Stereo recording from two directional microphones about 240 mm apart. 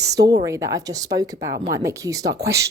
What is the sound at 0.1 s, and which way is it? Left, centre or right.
Speech, centre.